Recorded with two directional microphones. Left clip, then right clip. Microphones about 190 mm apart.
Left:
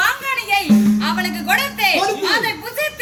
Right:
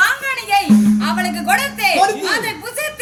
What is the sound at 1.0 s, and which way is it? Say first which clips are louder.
A woman's voice: right 2 dB; 5° right (ahead or behind).